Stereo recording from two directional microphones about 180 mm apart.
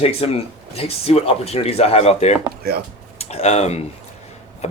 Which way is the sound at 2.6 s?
60° right (ahead or behind).